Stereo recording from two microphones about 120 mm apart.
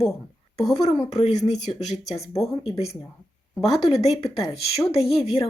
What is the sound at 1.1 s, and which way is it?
Speech, 70° left (ahead or behind).